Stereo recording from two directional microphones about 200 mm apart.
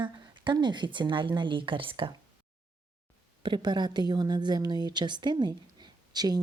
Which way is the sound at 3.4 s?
20° right (ahead or behind).